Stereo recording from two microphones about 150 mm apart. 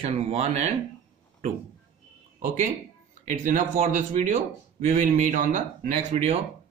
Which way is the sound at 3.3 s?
60° right (ahead or behind).